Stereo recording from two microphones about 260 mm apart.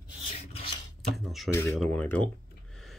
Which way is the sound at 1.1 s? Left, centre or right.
Centre.